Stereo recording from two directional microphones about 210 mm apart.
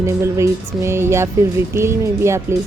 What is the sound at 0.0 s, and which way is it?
Music, 15° right (ahead or behind).